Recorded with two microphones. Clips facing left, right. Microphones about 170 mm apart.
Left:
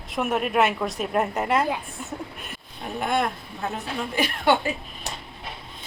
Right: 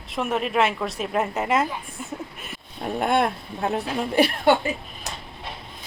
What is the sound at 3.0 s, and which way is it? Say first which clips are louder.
Speech: right 3 dB; 55° right (ahead or behind).